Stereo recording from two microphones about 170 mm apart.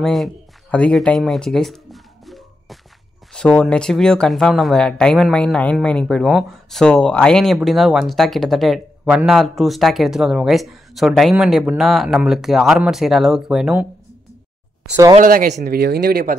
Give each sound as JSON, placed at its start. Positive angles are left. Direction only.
{"t": 0.0, "sound": "music", "side_deg": 0}
{"t": 3.3, "sound": "speech", "side_deg": 5}
{"t": 14.9, "sound": "speech", "side_deg": -20}
{"t": 15.1, "sound": "speech", "side_deg": -50}
{"t": 15.5, "sound": "speech", "side_deg": -65}